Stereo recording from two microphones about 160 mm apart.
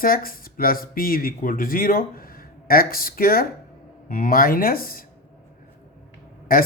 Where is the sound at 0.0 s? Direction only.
65° left (ahead or behind).